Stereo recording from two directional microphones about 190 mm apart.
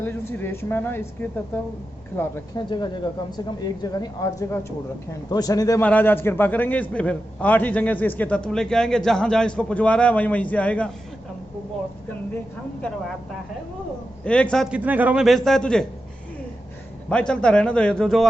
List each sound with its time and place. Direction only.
0.0 s a man's voice: 10° left (ahead or behind)
2.6 s a woman's voice: 25° left (ahead or behind); by 10.9 s 5° left (ahead or behind)
14.3 s a man's voice: 5° left (ahead or behind)
17.1 s a man's voice: 5° left (ahead or behind)